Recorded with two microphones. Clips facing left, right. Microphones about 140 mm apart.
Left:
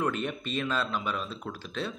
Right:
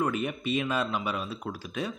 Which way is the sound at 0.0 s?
5° right (ahead or behind).